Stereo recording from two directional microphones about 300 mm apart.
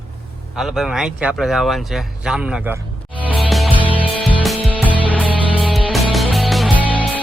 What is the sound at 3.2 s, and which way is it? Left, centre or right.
Music, centre.